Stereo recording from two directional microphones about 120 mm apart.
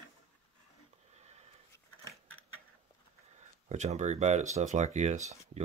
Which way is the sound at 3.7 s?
70° right (ahead or behind).